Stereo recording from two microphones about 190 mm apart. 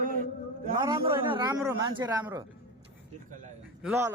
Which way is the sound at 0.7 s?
25° right (ahead or behind).